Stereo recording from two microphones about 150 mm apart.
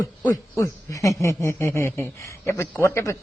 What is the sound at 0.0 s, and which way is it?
Speech, 20° left (ahead or behind).